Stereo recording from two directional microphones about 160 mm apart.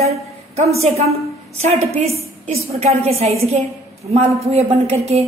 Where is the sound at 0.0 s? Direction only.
40° right (ahead or behind).